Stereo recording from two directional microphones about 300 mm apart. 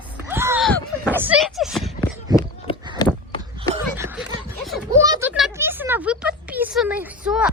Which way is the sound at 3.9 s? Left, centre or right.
Centre.